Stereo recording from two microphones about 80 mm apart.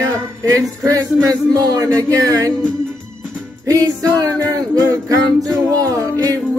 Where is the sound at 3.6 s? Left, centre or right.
Right.